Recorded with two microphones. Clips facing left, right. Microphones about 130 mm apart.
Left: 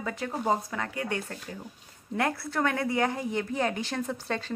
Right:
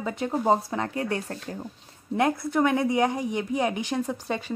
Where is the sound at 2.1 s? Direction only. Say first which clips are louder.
Right 5 dB; 20° right (ahead or behind).